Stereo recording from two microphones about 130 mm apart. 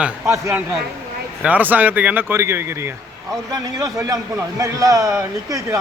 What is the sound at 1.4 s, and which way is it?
A man's voice, 10° right (ahead or behind).